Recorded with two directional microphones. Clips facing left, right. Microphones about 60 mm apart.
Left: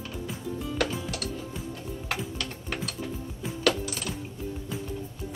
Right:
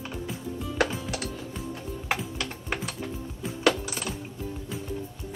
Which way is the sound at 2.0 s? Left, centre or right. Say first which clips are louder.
Right 3 dB; centre.